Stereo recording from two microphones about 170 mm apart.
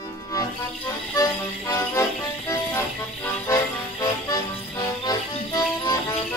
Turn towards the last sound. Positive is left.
turn(degrees=20)  # may be behind; listen again after turning